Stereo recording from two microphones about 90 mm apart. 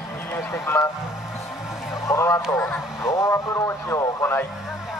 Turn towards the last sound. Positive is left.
turn(degrees=30)  # may be behind; listen again after turning